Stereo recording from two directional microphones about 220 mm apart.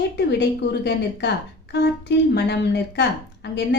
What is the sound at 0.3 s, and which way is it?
A woman's voice, 50° left (ahead or behind).